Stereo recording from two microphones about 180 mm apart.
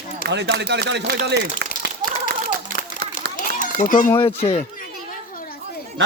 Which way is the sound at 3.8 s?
45° left (ahead or behind).